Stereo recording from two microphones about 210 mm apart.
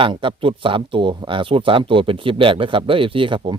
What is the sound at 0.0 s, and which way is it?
Speech, 25° right (ahead or behind).